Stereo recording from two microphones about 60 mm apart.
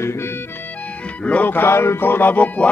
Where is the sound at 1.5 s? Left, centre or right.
Left.